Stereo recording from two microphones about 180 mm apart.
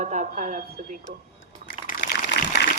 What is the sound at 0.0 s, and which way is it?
Speech, 45° right (ahead or behind).